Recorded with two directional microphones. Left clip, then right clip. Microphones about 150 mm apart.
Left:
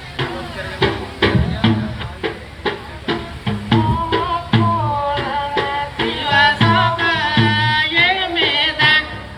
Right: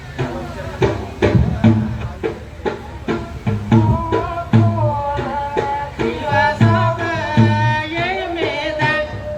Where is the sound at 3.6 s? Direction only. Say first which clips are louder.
Left 1 dB; 35° right (ahead or behind).